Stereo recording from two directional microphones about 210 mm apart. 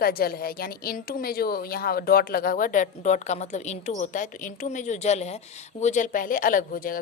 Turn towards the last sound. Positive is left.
turn(degrees=40)  # may be behind; listen again after turning